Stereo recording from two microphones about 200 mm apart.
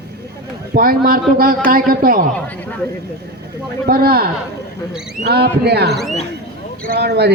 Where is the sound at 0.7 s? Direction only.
45° right (ahead or behind).